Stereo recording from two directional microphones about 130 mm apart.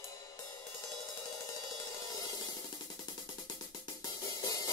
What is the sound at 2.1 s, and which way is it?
Music, 30° left (ahead or behind).